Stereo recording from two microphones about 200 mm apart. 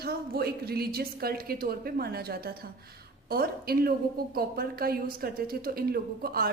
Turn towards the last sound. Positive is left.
turn(degrees=-50)  # may be behind; listen again after turning